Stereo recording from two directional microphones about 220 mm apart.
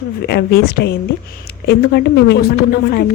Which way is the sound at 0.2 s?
45° left (ahead or behind).